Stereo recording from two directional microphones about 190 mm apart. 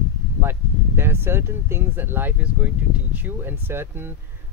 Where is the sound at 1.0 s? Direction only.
10° right (ahead or behind).